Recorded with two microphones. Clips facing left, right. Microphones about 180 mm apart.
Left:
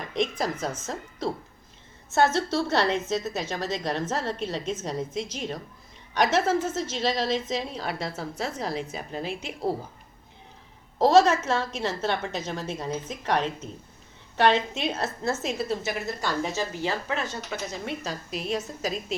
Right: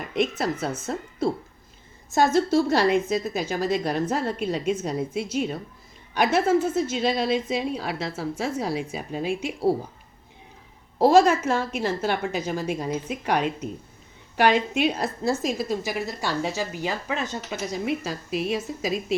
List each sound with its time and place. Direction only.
0.0 s a woman's voice: 5° right (ahead or behind)
10.9 s a woman's voice: 10° right (ahead or behind)